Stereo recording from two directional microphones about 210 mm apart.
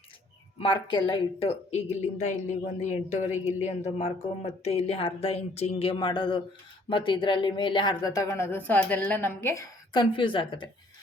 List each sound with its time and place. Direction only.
0.6 s speech: 25° left (ahead or behind)